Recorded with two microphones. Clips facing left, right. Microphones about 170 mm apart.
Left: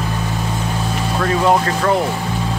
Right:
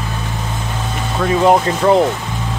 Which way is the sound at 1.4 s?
20° right (ahead or behind).